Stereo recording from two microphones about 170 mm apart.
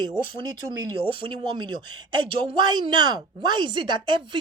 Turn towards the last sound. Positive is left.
turn(degrees=-30)  # may be behind; listen again after turning